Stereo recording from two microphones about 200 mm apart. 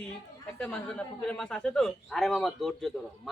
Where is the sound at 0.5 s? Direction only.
5° left (ahead or behind).